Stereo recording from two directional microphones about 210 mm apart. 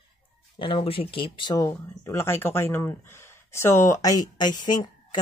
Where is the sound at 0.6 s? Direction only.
25° left (ahead or behind).